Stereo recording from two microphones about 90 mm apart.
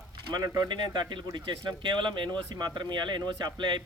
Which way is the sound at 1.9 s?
60° right (ahead or behind).